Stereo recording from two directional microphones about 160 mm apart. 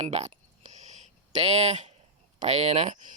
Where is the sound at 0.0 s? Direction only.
45° right (ahead or behind).